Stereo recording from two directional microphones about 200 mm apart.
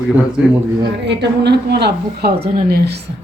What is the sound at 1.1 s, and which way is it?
A woman's voice, 60° right (ahead or behind).